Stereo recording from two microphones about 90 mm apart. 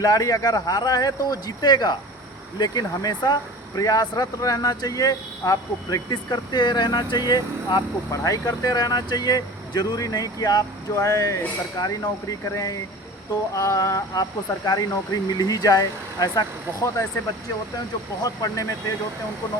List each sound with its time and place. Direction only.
0.0 s speech: 40° left (ahead or behind)
18.2 s speech: 40° left (ahead or behind)